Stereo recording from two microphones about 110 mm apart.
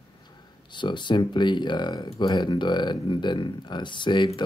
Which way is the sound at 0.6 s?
45° left (ahead or behind).